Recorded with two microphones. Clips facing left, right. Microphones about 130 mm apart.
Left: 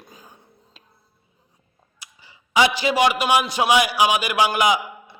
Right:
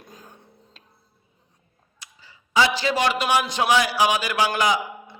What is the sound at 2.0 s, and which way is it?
A man's voice, 15° left (ahead or behind).